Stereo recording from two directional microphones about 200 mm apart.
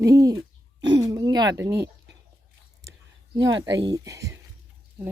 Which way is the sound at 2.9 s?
20° right (ahead or behind).